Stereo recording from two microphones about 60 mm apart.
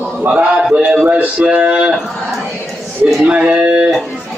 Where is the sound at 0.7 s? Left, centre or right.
Centre.